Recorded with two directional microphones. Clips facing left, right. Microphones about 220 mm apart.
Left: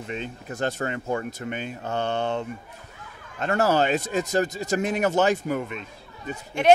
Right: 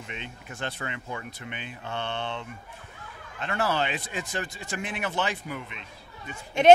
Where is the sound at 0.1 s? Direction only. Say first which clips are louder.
Left 10 dB; 40° left (ahead or behind).